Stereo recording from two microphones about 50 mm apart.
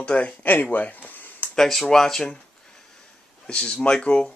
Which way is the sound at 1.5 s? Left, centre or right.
Centre.